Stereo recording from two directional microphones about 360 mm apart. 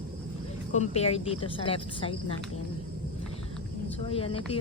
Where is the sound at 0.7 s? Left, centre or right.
Centre.